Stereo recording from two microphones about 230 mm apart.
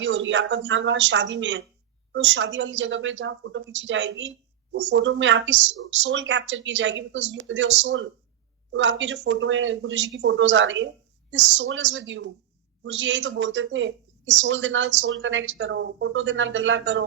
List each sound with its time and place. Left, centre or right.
0.0 s a woman's voice: right